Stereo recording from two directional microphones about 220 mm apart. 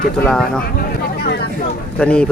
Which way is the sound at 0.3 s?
5° left (ahead or behind).